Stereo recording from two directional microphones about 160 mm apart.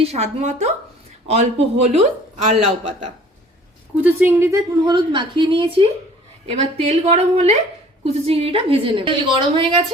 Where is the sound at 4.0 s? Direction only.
10° right (ahead or behind).